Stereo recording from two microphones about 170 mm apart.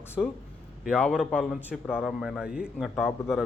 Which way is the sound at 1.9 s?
Centre (ahead or behind).